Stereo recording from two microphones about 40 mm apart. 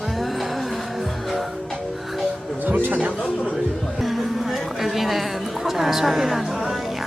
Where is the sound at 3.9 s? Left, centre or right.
Centre.